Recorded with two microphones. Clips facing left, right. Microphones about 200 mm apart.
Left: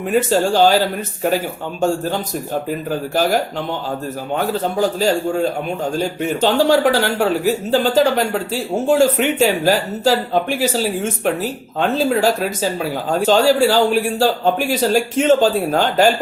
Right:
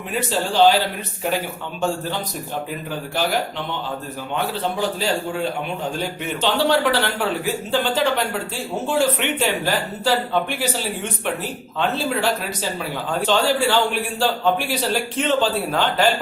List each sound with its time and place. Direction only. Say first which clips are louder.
0.1 s speech: left 8 dB; 45° left (ahead or behind)
4.4 s speech: left 5 dB; 45° left (ahead or behind)
13.1 s a man's voice: left 6 dB; 40° left (ahead or behind)